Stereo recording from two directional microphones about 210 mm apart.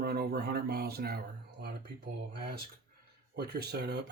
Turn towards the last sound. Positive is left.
turn(degrees=-50)  # may be behind; listen again after turning